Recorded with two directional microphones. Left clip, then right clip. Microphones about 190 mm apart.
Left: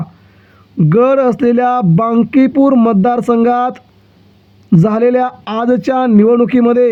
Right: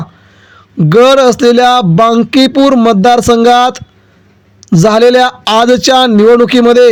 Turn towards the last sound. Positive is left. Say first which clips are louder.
# right 6 dB
turn(degrees=-30)  # may be behind; listen again after turning